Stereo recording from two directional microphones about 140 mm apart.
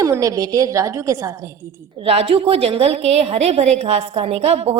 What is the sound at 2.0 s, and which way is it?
A woman's voice, 45° right (ahead or behind).